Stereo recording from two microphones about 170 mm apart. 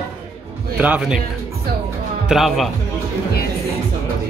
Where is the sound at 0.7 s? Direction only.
10° right (ahead or behind).